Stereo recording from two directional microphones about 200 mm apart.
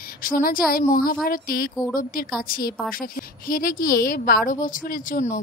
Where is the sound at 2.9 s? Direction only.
45° left (ahead or behind).